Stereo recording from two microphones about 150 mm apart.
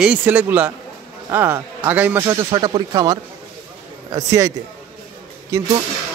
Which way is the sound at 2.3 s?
25° right (ahead or behind).